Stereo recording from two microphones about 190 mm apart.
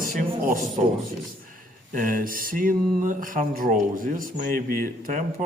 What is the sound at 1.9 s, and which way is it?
Speech, 45° right (ahead or behind).